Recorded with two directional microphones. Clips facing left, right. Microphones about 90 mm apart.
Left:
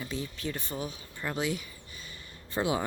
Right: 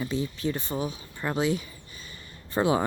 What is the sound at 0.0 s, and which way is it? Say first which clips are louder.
Speech: right 7 dB; 25° right (ahead or behind).